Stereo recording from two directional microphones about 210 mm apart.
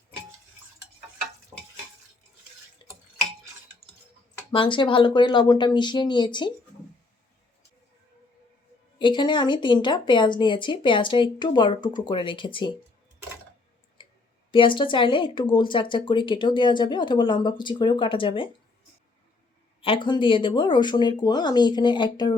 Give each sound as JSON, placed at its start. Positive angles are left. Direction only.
{"t": 2.8, "sound": "drip", "side_deg": 20}
{"t": 4.5, "sound": "speech", "side_deg": 25}
{"t": 9.0, "sound": "speech", "side_deg": 20}
{"t": 14.0, "sound": "clicking", "side_deg": 25}
{"t": 14.5, "sound": "speech", "side_deg": 25}
{"t": 19.8, "sound": "speech", "side_deg": 25}